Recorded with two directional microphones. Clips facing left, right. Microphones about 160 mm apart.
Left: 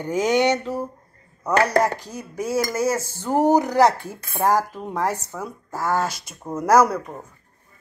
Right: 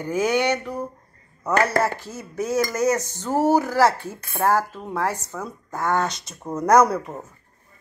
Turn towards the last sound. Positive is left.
turn(degrees=5)  # may be behind; listen again after turning